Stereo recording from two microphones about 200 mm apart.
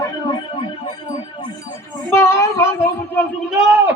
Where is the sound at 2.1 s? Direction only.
15° left (ahead or behind).